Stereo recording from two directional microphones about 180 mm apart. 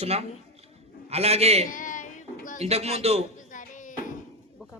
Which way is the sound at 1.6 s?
45° left (ahead or behind).